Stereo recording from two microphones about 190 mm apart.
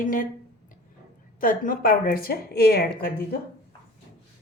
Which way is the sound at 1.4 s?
45° left (ahead or behind).